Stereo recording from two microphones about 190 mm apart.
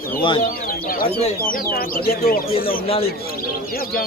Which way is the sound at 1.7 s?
55° left (ahead or behind).